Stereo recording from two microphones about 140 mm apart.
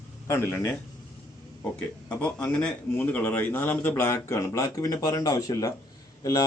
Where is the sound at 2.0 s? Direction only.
5° left (ahead or behind).